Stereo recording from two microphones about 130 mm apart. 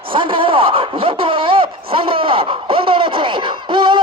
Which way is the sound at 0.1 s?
40° right (ahead or behind).